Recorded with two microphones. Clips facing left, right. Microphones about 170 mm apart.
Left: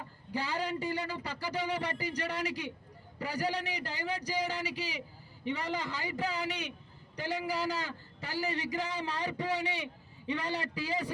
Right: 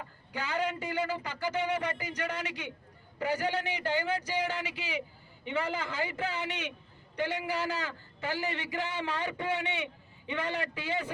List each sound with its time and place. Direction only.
0.3 s a man's voice: 35° left (ahead or behind)